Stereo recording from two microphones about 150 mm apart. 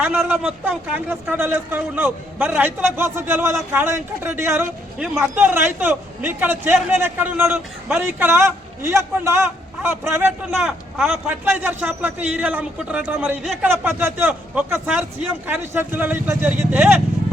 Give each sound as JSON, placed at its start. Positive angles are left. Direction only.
{"t": 0.0, "sound": "a man's voice", "side_deg": -5}
{"t": 10.5, "sound": "a man's voice", "side_deg": -5}